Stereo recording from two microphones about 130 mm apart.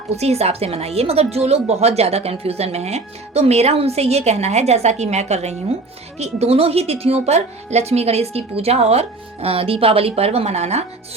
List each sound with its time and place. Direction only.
0.2 s speech: 55° right (ahead or behind)